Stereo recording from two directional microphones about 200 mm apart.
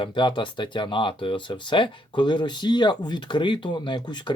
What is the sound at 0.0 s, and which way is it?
Speech, 25° left (ahead or behind).